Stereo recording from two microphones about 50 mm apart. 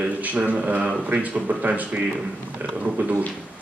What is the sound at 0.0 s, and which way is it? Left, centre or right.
A man's voice, right.